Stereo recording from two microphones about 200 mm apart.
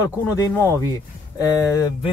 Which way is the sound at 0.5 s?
10° left (ahead or behind).